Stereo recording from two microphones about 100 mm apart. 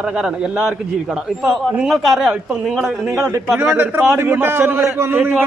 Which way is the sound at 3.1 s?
35° right (ahead or behind).